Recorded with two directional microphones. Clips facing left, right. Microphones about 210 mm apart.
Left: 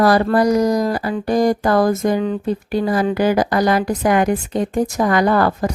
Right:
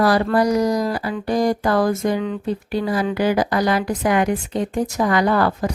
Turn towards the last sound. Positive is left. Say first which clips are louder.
# left 2 dB
turn(degrees=45)  # may be behind; listen again after turning